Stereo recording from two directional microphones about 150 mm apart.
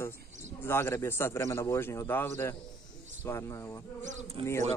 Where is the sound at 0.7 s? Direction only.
15° left (ahead or behind).